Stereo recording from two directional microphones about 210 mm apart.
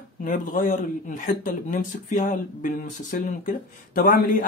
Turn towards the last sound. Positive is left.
turn(degrees=40)  # may be behind; listen again after turning